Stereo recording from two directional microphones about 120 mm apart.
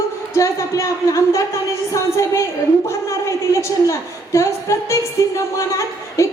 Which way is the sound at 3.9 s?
25° left (ahead or behind).